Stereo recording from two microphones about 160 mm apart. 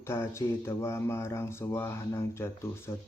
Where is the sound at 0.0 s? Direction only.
15° left (ahead or behind).